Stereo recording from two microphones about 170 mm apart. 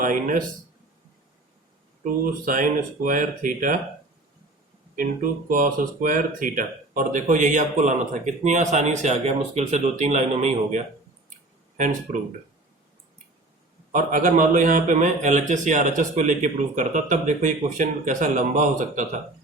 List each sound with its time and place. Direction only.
0.0 s speech: 50° right (ahead or behind)
2.4 s speech: 55° right (ahead or behind)
4.9 s speech: 55° right (ahead or behind)
13.9 s speech: 50° right (ahead or behind)